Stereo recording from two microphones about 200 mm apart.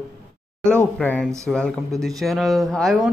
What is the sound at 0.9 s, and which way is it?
A man's voice, 5° left (ahead or behind).